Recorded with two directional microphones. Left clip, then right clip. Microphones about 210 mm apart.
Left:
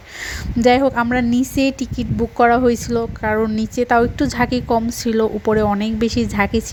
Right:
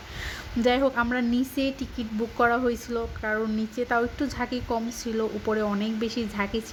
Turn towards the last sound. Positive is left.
turn(degrees=35)  # may be behind; listen again after turning